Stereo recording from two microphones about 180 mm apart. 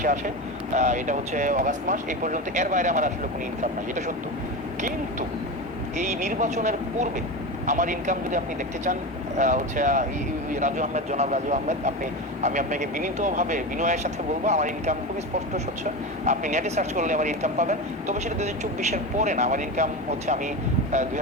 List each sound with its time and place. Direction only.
0.7 s speech: 40° right (ahead or behind)
6.0 s speech: 40° right (ahead or behind)
9.4 s speech: 45° right (ahead or behind)